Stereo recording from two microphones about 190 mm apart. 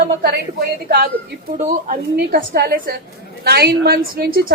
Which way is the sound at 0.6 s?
50° right (ahead or behind).